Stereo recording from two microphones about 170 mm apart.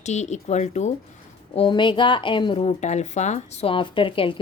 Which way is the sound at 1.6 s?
30° left (ahead or behind).